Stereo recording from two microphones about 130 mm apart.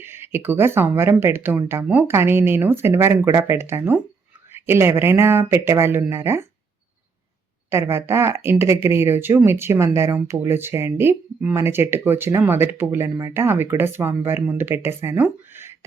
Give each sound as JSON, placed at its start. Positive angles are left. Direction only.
{"t": 0.0, "sound": "speech", "side_deg": -20}
{"t": 7.7, "sound": "speech", "side_deg": -20}